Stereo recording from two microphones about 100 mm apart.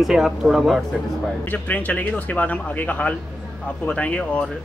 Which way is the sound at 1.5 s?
15° left (ahead or behind).